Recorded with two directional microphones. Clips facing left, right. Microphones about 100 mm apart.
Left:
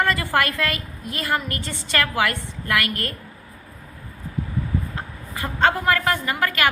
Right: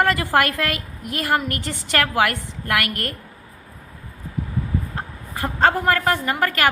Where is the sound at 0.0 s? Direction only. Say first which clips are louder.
Right 3 dB; 55° right (ahead or behind).